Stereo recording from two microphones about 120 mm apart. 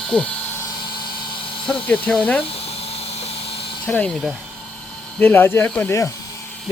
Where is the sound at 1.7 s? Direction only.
10° left (ahead or behind).